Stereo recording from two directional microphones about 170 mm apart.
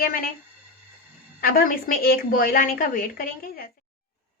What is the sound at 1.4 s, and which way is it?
A woman's voice, 60° left (ahead or behind).